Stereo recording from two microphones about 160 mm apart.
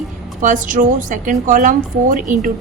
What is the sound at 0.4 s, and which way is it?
A woman's voice, 50° right (ahead or behind).